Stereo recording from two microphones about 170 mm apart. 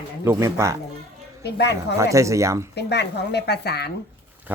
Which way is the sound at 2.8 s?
80° left.